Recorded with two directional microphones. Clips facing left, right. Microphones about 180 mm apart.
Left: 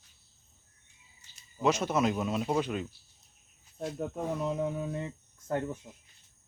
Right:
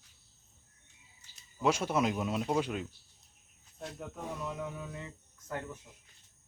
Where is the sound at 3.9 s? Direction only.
30° left (ahead or behind).